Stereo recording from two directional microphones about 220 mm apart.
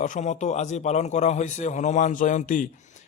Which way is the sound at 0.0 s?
35° left (ahead or behind).